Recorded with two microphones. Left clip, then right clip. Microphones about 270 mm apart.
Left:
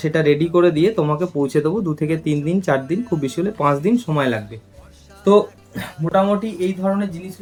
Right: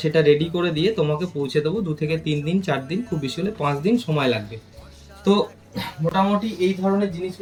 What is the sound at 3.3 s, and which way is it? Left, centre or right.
Speech, centre.